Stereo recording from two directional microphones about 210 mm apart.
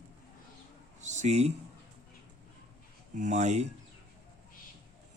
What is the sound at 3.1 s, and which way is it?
Speech, 35° right (ahead or behind).